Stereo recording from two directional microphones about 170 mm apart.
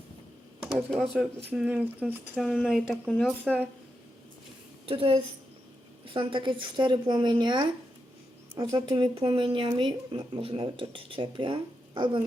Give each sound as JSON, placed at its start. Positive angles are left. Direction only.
{"t": 0.6, "sound": "speech", "side_deg": 0}
{"t": 4.9, "sound": "a woman's voice", "side_deg": -30}